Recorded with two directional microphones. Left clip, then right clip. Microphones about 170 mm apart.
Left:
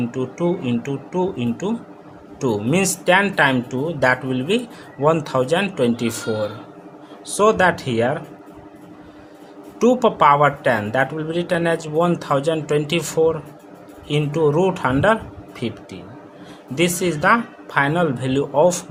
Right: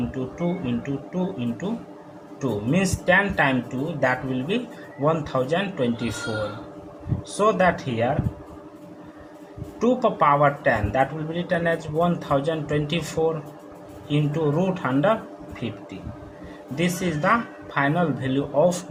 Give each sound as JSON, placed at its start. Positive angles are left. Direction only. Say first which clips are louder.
{"t": 0.3, "sound": "speech", "louder": "left 7 dB", "side_deg": 55}
{"t": 7.3, "sound": "speech", "louder": "left 4 dB", "side_deg": 55}
{"t": 9.8, "sound": "speech", "louder": "left 5 dB", "side_deg": 55}
{"t": 16.7, "sound": "speech", "louder": "left 6 dB", "side_deg": 50}